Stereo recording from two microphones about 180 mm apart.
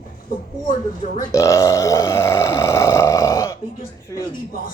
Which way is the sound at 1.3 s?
15° left (ahead or behind).